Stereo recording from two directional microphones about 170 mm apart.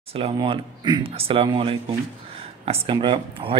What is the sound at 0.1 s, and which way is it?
Speech, 35° right (ahead or behind).